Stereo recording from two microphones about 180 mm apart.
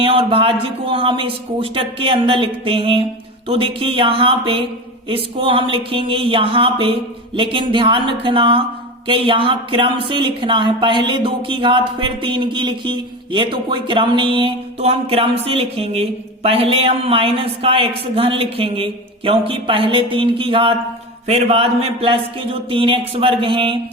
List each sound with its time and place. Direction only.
0.0 s a man's voice: 30° right (ahead or behind)